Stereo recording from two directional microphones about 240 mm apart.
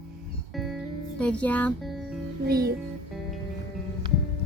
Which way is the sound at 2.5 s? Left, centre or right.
Right.